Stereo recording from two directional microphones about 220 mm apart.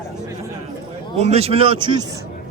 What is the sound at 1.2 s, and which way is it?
Speech, 30° right (ahead or behind).